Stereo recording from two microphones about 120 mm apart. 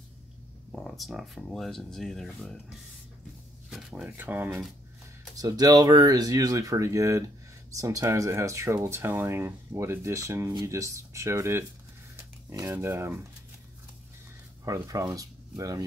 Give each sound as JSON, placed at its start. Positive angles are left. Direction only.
{"t": 0.7, "sound": "speech", "side_deg": 0}
{"t": 3.7, "sound": "speech", "side_deg": -10}
{"t": 5.3, "sound": "speech", "side_deg": -30}
{"t": 12.2, "sound": "a sound", "side_deg": -25}
{"t": 12.7, "sound": "speech", "side_deg": -20}
{"t": 14.6, "sound": "speech", "side_deg": -25}